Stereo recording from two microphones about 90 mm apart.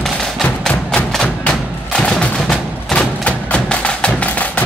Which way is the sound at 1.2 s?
10° left (ahead or behind).